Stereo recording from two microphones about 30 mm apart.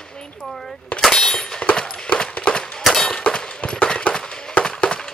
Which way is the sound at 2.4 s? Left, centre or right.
Left.